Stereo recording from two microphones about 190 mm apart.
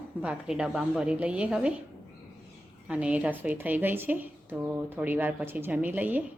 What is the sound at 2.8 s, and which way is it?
A woman's voice, 5° right (ahead or behind).